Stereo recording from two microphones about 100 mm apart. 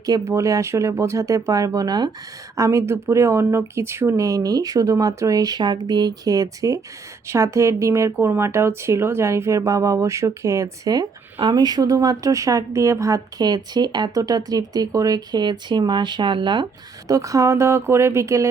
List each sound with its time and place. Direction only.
0.0 s a woman's voice: 35° right (ahead or behind)
2.6 s a woman's voice: 30° right (ahead or behind); by 16.6 s 50° right (ahead or behind)
17.1 s speech: 35° right (ahead or behind)